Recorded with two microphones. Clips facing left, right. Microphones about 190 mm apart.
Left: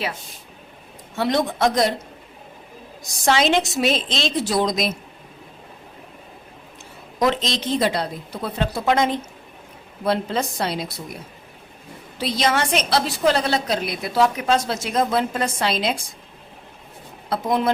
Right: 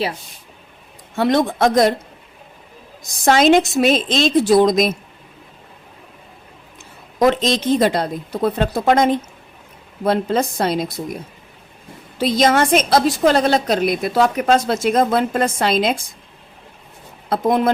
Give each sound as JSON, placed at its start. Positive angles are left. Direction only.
{"t": 1.1, "sound": "a woman's voice", "side_deg": -50}
{"t": 3.2, "sound": "a woman's voice", "side_deg": -50}
{"t": 7.2, "sound": "a woman's voice", "side_deg": -50}
{"t": 12.2, "sound": "a woman's voice", "side_deg": -45}
{"t": 17.2, "sound": "speech", "side_deg": -50}